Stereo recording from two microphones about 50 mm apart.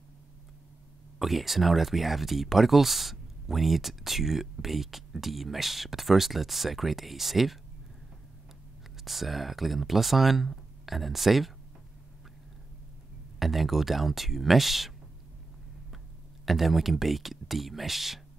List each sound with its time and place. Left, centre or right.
1.2 s speech: centre
9.0 s speech: centre
13.4 s speech: centre
16.4 s speech: centre